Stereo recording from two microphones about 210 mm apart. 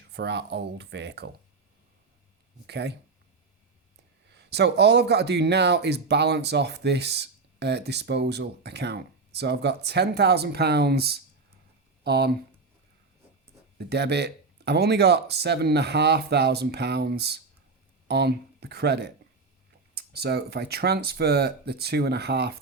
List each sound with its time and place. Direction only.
0.1 s speech: 55° right (ahead or behind)
2.6 s speech: 50° right (ahead or behind)
4.4 s speech: 55° right (ahead or behind)
13.7 s speech: 50° right (ahead or behind)